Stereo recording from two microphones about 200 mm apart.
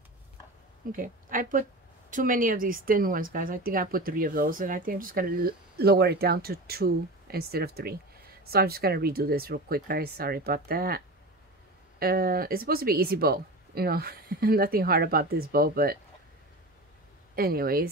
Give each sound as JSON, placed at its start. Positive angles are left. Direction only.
{"t": 0.9, "sound": "speech", "side_deg": -45}
{"t": 12.0, "sound": "speech", "side_deg": -50}
{"t": 17.4, "sound": "speech", "side_deg": -50}